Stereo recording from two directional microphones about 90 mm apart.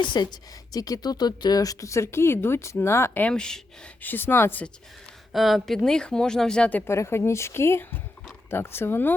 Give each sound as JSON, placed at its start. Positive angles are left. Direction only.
{"t": 0.0, "sound": "speech", "side_deg": 55}
{"t": 3.2, "sound": "speech", "side_deg": 10}
{"t": 4.0, "sound": "speech", "side_deg": 20}
{"t": 5.3, "sound": "speech", "side_deg": 0}
{"t": 6.8, "sound": "speech", "side_deg": 30}